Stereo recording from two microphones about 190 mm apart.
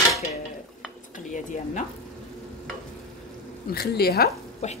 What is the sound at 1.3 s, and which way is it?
Speech, 40° left (ahead or behind).